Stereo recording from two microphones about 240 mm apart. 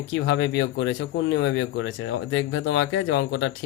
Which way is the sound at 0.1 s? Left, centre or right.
Left.